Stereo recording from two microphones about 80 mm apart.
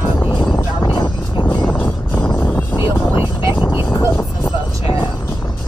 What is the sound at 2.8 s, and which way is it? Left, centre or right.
Vehicle, left.